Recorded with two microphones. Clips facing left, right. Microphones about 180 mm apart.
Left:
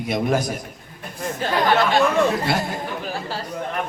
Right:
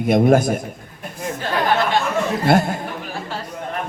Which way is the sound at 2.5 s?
50° right (ahead or behind).